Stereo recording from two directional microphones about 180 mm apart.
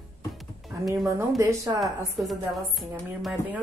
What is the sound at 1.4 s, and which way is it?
Speech, 20° right (ahead or behind).